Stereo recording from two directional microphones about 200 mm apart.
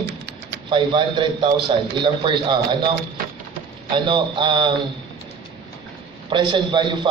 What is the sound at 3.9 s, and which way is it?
Speech, 25° right (ahead or behind).